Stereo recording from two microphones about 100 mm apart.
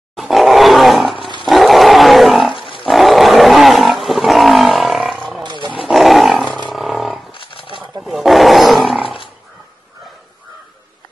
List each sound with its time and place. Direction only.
0.1 s roar: centre (ahead or behind)
1.4 s roaring cats: centre (ahead or behind)
2.8 s roar: centre (ahead or behind)
5.4 s roaring cats: 50° right (ahead or behind)
5.8 s roar: centre (ahead or behind)
6.7 s roaring cats: centre (ahead or behind)
7.3 s wild animals: 60° left (ahead or behind)
8.0 s roar: centre (ahead or behind)